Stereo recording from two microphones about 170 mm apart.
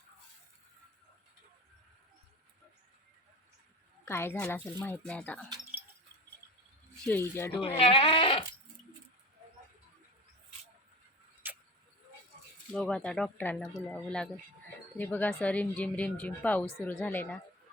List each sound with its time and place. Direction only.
4.0 s speech: 15° left (ahead or behind)
7.0 s speech: 10° left (ahead or behind)
7.8 s speech: 35° left (ahead or behind)
11.4 s a sound: 10° right (ahead or behind)
12.7 s speech: 5° left (ahead or behind)